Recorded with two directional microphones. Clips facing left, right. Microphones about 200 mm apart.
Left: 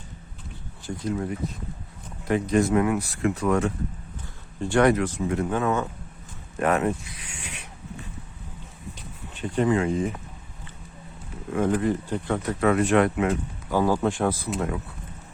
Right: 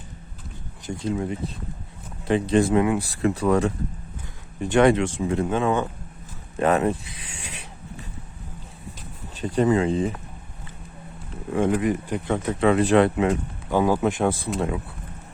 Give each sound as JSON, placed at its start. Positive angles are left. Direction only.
{"t": 0.9, "sound": "speech", "side_deg": -25}
{"t": 4.6, "sound": "speech", "side_deg": -20}
{"t": 6.6, "sound": "a sound", "side_deg": -30}
{"t": 9.3, "sound": "speech", "side_deg": -35}
{"t": 11.7, "sound": "speech", "side_deg": -15}